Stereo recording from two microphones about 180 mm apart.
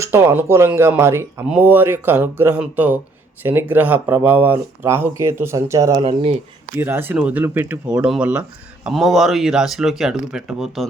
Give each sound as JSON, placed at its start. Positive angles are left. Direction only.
{"t": 0.0, "sound": "speech", "side_deg": -10}
{"t": 6.0, "sound": "speech", "side_deg": -35}
{"t": 6.7, "sound": "speech", "side_deg": -10}